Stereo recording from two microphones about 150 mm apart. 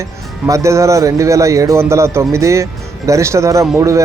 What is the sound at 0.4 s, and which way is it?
A man's voice, 20° right (ahead or behind).